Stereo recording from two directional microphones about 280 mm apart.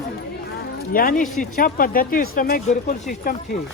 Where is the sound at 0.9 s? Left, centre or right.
Left.